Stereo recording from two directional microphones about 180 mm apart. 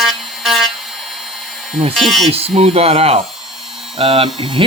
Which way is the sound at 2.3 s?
35° right (ahead or behind).